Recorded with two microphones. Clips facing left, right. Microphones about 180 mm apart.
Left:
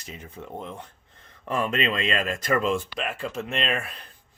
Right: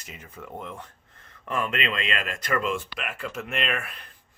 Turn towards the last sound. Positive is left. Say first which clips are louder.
# left 2 dB
turn(degrees=30)  # may be behind; listen again after turning